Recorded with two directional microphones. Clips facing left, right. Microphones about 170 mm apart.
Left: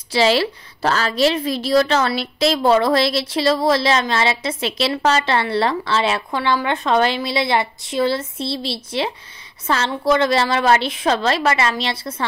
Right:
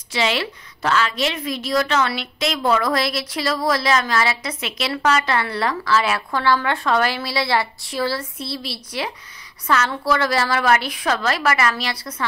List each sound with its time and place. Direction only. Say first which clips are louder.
0.1 s a woman's voice: left 6 dB; 35° left (ahead or behind)